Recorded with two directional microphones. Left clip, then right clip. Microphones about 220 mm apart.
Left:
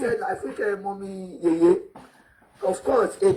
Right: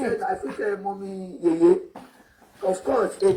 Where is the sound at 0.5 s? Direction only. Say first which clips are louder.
Even; 40° left (ahead or behind).